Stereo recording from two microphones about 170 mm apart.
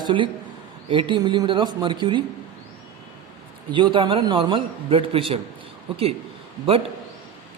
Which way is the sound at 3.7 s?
30° right (ahead or behind).